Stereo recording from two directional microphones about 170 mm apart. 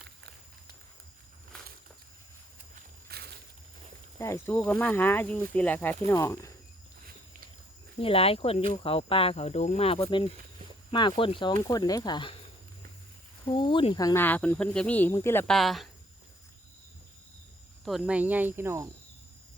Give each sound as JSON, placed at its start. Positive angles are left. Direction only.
{"t": 2.7, "sound": "walk", "side_deg": -65}
{"t": 4.2, "sound": "speech", "side_deg": 15}
{"t": 7.9, "sound": "speech", "side_deg": 35}
{"t": 13.4, "sound": "speech", "side_deg": 30}
{"t": 15.4, "sound": "speech", "side_deg": 0}
{"t": 17.8, "sound": "speech", "side_deg": -5}